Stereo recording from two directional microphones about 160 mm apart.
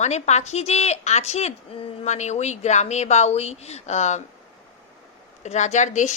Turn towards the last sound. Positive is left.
turn(degrees=50)  # may be behind; listen again after turning